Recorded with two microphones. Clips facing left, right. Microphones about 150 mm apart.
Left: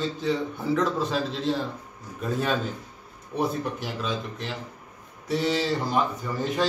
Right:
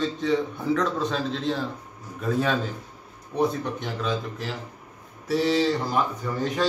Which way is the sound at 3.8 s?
Centre (ahead or behind).